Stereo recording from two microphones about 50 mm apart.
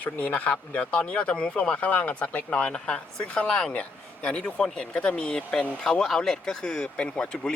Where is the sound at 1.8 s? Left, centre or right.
Left.